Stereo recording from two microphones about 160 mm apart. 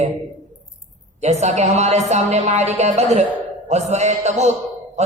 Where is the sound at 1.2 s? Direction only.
45° right (ahead or behind).